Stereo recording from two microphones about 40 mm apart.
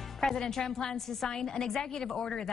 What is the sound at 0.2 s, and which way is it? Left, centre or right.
A woman's voice, centre.